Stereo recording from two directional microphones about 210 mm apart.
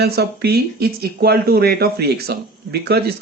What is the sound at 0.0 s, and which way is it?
Speech, 50° right (ahead or behind).